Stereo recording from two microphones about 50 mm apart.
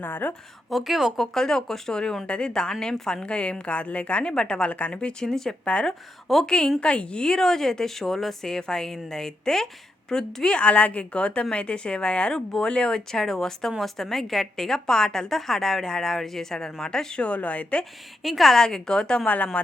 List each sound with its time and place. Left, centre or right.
0.0 s a woman's voice: left
0.7 s a woman's voice: centre; by 4.3 s left
4.3 s a woman's voice: centre
5.2 s speech: centre
6.7 s a woman's voice: left
17.2 s a woman's voice: left
18.2 s speech: centre; by 19.5 s left